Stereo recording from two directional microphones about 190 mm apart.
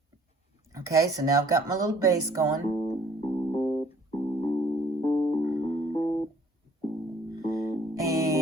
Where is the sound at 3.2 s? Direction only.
25° left (ahead or behind).